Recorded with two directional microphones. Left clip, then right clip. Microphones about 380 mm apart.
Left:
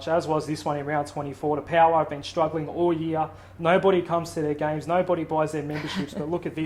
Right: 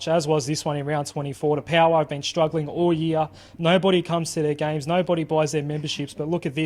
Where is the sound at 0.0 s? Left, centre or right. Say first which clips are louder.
Right 3 dB; right.